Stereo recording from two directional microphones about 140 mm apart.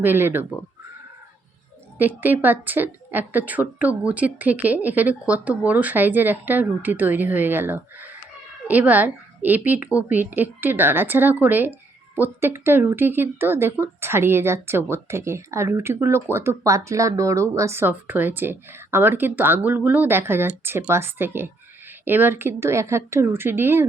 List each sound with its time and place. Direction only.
0.0 s a woman's voice: 15° right (ahead or behind)
2.0 s a woman's voice: 15° right (ahead or behind)